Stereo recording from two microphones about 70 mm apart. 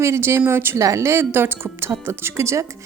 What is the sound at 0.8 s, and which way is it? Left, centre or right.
A woman's voice, right.